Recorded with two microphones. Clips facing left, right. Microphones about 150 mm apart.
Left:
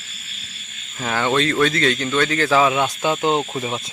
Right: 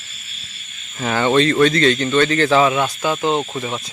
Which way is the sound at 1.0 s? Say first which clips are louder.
Right 4 dB; centre (ahead or behind).